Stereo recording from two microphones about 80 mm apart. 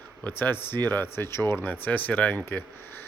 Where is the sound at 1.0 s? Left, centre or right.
Left.